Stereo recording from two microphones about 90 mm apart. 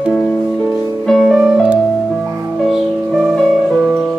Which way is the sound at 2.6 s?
Centre (ahead or behind).